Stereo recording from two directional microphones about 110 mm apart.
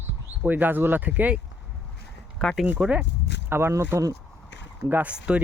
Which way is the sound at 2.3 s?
5° left (ahead or behind).